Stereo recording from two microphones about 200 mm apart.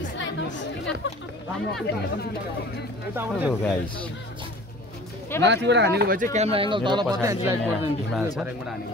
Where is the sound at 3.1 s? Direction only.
10° right (ahead or behind).